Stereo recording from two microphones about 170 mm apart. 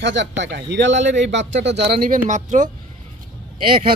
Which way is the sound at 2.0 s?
50° right (ahead or behind).